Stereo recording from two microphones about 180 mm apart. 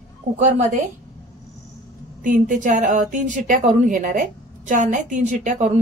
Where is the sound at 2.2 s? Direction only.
45° right (ahead or behind).